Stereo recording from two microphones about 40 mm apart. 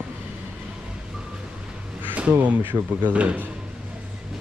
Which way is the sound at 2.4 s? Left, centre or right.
Right.